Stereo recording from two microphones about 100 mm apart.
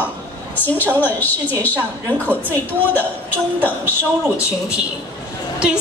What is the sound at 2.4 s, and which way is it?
Speech, 20° left (ahead or behind).